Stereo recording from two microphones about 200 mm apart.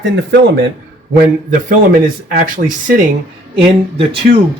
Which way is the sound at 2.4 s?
45° right (ahead or behind).